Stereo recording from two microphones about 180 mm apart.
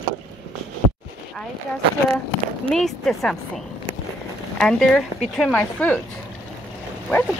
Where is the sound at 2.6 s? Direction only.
5° left (ahead or behind).